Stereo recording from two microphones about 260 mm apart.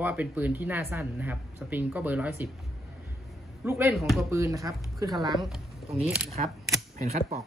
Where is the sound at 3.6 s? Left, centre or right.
Centre.